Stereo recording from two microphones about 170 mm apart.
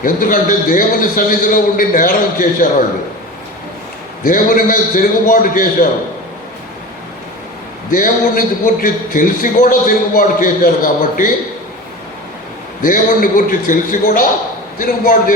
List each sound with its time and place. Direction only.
0.0 s a man's voice: 55° left (ahead or behind)
4.2 s a man's voice: 55° left (ahead or behind)
7.9 s a man's voice: 55° left (ahead or behind)
12.8 s a man's voice: 55° left (ahead or behind)